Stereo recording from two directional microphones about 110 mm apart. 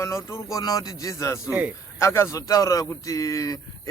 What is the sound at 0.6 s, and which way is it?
Speech, 35° left (ahead or behind).